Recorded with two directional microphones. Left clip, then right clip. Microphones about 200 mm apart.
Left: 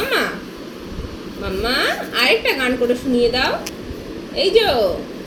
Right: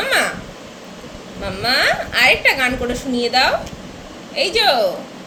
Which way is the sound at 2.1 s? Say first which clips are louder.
Right 2 dB; 30° right (ahead or behind).